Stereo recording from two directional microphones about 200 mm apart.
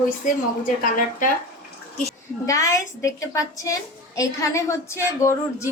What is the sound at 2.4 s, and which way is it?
A woman's voice, 15° left (ahead or behind).